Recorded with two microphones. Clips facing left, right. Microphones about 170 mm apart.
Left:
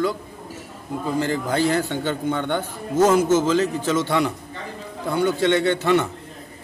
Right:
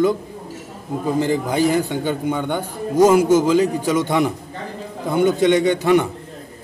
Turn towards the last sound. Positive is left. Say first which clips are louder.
# right 3 dB
turn(degrees=-15)  # may be behind; listen again after turning